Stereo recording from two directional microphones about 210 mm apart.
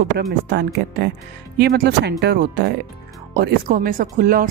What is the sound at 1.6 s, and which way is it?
Speech, 50° right (ahead or behind).